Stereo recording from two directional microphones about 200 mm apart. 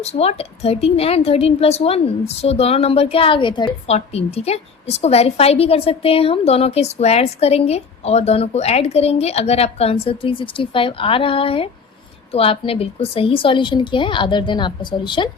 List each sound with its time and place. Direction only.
0.0 s a woman's voice: 30° left (ahead or behind)